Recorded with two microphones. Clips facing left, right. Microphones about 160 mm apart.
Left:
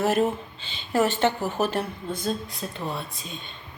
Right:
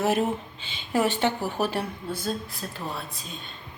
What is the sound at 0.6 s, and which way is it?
Speech, 10° right (ahead or behind).